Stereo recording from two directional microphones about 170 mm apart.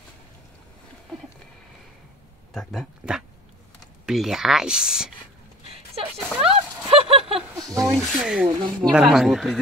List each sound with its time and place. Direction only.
2.5 s speech: centre (ahead or behind)
5.9 s a sound: 35° right (ahead or behind)
7.7 s speech: centre (ahead or behind)